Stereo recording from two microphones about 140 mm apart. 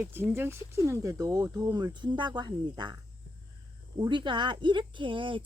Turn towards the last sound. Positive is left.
turn(degrees=-35)  # may be behind; listen again after turning